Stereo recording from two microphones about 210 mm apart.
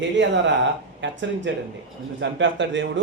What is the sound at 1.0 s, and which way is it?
Speech, 60° right (ahead or behind).